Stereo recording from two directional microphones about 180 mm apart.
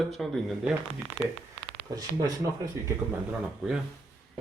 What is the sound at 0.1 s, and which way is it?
Speech, centre (ahead or behind).